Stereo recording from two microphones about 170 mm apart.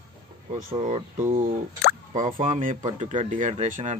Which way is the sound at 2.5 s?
50° right (ahead or behind).